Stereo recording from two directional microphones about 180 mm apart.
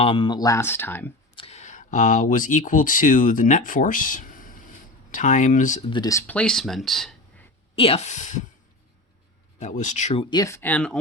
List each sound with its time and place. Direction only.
0.0 s speech: 30° left (ahead or behind); by 1.1 s 10° left (ahead or behind)
1.4 s speech: 35° left (ahead or behind)
5.9 s speech: 20° left (ahead or behind); by 7.4 s centre (ahead or behind)
7.8 s speech: 35° left (ahead or behind)
9.6 s speech: 45° left (ahead or behind)
10.2 s speech: 20° left (ahead or behind)